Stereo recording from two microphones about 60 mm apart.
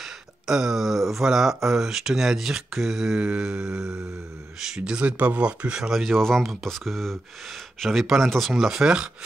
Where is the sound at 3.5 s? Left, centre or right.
Right.